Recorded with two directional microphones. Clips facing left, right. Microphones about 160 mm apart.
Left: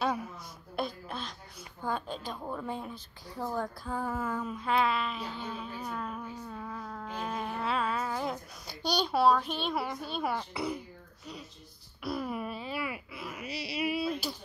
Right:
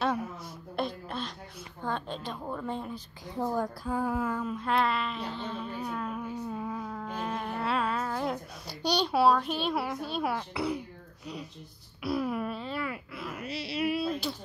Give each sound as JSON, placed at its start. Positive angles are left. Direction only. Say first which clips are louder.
{"t": 0.7, "sound": "a sound", "louder": "right 2 dB", "side_deg": 5}
{"t": 1.8, "sound": "speech", "louder": "even", "side_deg": 5}
{"t": 3.3, "sound": "a woman's voice", "louder": "right 4 dB", "side_deg": -20}
{"t": 3.8, "sound": "speech", "louder": "right 4 dB", "side_deg": -5}
{"t": 4.3, "sound": "speech", "louder": "right 1 dB", "side_deg": 5}
{"t": 6.4, "sound": "a sound", "louder": "right 5 dB", "side_deg": -15}
{"t": 9.0, "sound": "speech", "louder": "right 1 dB", "side_deg": -5}
{"t": 12.0, "sound": "speech", "louder": "right 4 dB", "side_deg": -5}